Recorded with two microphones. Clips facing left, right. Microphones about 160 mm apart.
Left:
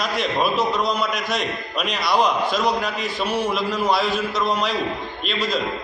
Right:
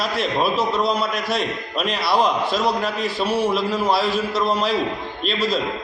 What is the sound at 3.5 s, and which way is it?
Speech, centre (ahead or behind).